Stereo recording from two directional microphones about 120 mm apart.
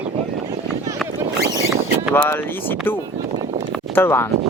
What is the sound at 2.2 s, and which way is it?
Speech, 15° left (ahead or behind).